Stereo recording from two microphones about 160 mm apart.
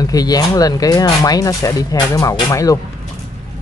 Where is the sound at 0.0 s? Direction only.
25° left (ahead or behind).